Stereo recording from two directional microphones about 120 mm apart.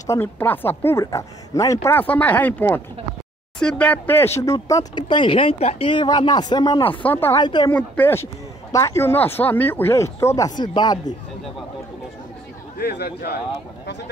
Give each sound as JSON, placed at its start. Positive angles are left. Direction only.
{"t": 0.0, "sound": "speech", "side_deg": 20}
{"t": 1.9, "sound": "speech", "side_deg": 15}
{"t": 5.0, "sound": "speech", "side_deg": 45}
{"t": 7.0, "sound": "speech", "side_deg": 15}
{"t": 7.3, "sound": "speech", "side_deg": 40}
{"t": 7.7, "sound": "speech", "side_deg": 15}